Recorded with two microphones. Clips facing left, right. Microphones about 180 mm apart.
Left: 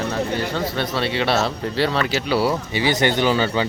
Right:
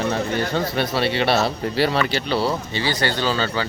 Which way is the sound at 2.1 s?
5° left (ahead or behind).